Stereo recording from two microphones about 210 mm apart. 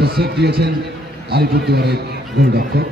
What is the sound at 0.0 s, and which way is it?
Speech, 50° right (ahead or behind).